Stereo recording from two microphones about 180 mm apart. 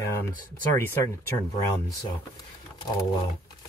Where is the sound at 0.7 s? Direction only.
10° left (ahead or behind).